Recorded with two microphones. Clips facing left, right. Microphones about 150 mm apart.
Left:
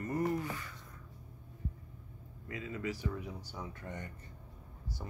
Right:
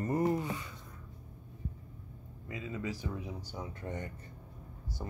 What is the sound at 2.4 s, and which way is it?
Speech, 20° right (ahead or behind).